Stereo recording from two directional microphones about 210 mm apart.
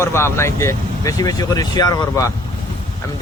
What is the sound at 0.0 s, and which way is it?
Speech, 10° left (ahead or behind).